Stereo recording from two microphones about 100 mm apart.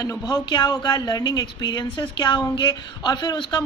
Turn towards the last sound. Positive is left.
turn(degrees=45)  # may be behind; listen again after turning